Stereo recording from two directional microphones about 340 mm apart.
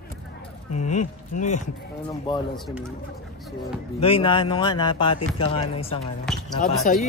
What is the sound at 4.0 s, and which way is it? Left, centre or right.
Speech, centre.